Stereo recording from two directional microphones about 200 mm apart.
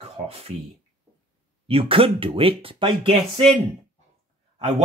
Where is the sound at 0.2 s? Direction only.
35° right (ahead or behind).